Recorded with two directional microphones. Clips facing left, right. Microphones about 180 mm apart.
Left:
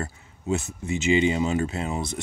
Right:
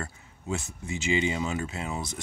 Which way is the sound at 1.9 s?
20° left (ahead or behind).